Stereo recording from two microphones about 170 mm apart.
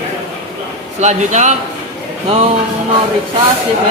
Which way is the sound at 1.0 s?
45° right (ahead or behind).